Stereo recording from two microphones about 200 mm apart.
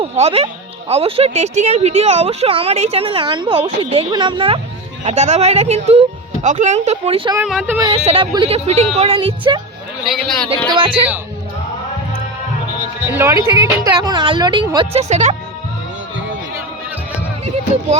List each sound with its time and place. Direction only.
0.0 s speech: 30° right (ahead or behind)
7.4 s speech: centre (ahead or behind)
7.8 s speech: 25° right (ahead or behind)
10.1 s speech: centre (ahead or behind)
10.7 s speech: 25° right (ahead or behind)
13.1 s speech: 10° right (ahead or behind); by 15.4 s 35° right (ahead or behind)